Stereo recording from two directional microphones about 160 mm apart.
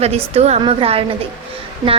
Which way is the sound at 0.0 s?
40° right (ahead or behind).